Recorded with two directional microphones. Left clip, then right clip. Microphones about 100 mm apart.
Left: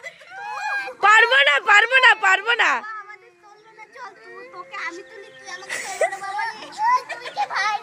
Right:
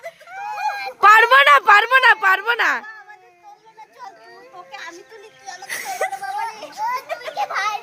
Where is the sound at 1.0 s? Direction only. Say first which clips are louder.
Right 4 dB; 75° right (ahead or behind); by 2.1 s 60° right (ahead or behind).